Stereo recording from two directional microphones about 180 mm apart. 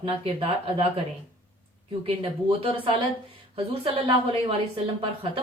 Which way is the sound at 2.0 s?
30° right (ahead or behind).